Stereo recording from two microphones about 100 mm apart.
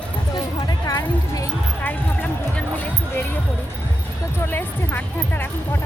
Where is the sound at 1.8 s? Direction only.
20° left (ahead or behind).